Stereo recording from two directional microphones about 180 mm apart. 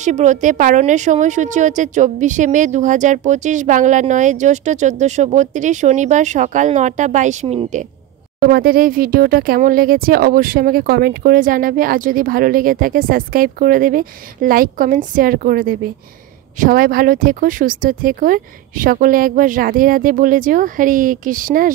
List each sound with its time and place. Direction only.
0.0 s a woman's voice: 40° right (ahead or behind)
8.4 s a woman's voice: 55° right (ahead or behind)